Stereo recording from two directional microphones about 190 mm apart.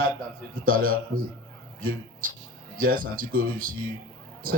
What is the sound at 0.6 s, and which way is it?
Speech, 50° right (ahead or behind).